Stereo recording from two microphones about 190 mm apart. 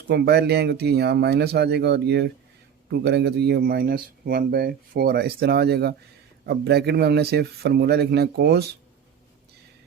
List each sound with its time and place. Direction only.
0.1 s speech: 60° right (ahead or behind)